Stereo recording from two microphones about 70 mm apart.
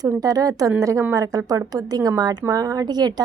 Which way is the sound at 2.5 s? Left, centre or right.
Right.